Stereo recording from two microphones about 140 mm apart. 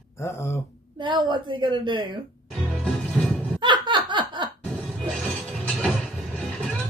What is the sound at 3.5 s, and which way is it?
Laughter, 35° right (ahead or behind).